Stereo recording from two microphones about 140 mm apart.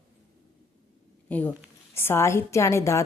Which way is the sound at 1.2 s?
10° left (ahead or behind).